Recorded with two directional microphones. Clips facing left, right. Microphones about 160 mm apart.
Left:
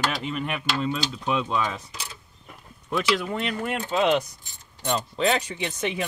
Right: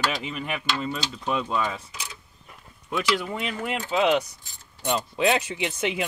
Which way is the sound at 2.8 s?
Centre (ahead or behind).